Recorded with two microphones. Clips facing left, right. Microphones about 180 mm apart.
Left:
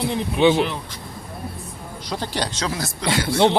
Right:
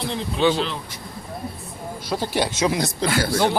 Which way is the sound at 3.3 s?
25° left (ahead or behind).